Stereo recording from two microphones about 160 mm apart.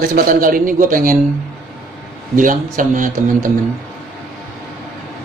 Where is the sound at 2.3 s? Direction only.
55° right (ahead or behind).